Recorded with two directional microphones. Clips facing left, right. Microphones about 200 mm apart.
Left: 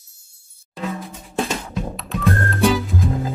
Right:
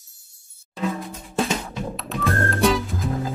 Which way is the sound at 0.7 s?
Centre (ahead or behind).